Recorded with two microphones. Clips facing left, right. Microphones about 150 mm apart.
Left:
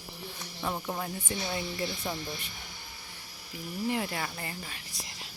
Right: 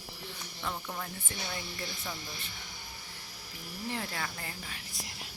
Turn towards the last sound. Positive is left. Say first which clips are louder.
# left 4 dB
turn(degrees=10)  # may be behind; listen again after turning